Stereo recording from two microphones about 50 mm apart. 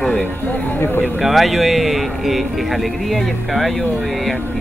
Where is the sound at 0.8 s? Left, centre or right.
Left.